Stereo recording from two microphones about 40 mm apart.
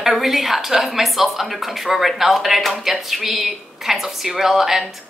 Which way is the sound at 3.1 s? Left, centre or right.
Centre.